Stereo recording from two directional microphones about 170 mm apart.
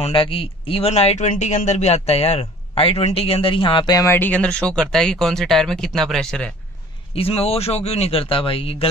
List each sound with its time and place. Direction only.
0.0 s speech: 30° left (ahead or behind); by 6.5 s 5° left (ahead or behind)
7.2 s speech: 35° left (ahead or behind)